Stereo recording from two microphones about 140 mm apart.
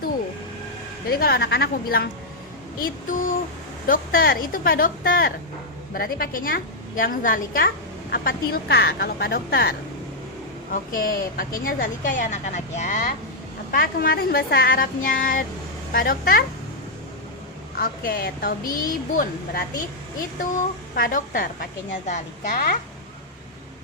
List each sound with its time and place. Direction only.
1.0 s a woman's voice: 90° left; by 13.1 s 65° left (ahead or behind)
13.7 s a woman's voice: 90° left
15.9 s a woman's voice: 90° left
17.7 s a woman's voice: 90° left
20.9 s a woman's voice: 85° left
22.0 s a woman's voice: 60° left (ahead or behind)